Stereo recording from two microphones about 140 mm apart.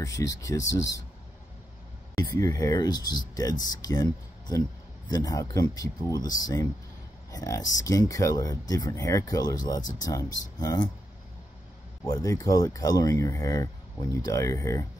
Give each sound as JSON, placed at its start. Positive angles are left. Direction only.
{"t": 0.0, "sound": "speech", "side_deg": 25}
{"t": 2.1, "sound": "speech", "side_deg": 20}
{"t": 12.1, "sound": "speech", "side_deg": 25}